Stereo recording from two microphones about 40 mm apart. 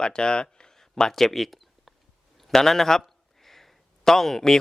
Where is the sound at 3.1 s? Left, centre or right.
Centre.